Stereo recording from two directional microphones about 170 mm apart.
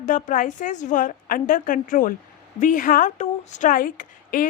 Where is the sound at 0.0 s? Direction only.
50° left (ahead or behind).